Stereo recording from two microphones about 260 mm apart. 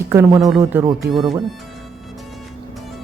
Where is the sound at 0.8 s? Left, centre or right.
Centre.